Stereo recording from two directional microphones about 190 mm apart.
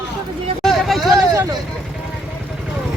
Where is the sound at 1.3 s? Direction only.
15° right (ahead or behind).